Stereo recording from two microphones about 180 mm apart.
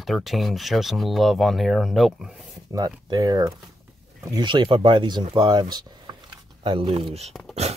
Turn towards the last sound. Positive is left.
turn(degrees=0)  # may be behind; listen again after turning